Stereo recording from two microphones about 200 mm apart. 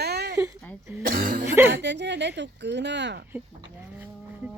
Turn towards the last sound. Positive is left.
turn(degrees=-60)  # may be behind; listen again after turning